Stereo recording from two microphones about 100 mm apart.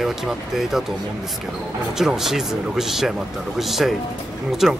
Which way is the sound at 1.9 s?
5° right (ahead or behind).